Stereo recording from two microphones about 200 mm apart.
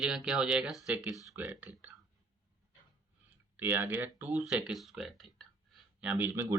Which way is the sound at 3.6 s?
10° right (ahead or behind).